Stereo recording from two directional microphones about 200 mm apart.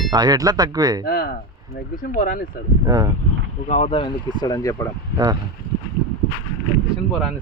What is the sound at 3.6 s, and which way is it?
Speech, 35° left (ahead or behind).